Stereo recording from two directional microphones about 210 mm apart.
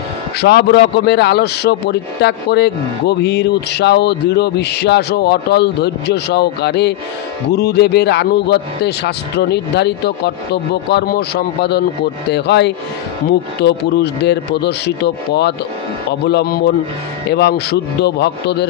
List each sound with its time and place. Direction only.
0.4 s a man's voice: 50° left (ahead or behind)